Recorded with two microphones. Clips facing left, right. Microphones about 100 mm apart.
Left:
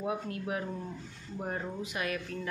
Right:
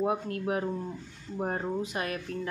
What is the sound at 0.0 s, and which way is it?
Speech, 40° right (ahead or behind).